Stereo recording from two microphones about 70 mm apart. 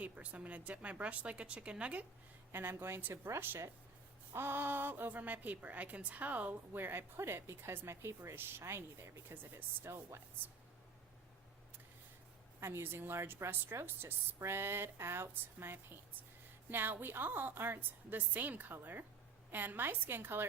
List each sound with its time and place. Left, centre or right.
0.0 s a woman's voice: centre
2.5 s a woman's voice: right
12.5 s a woman's voice: right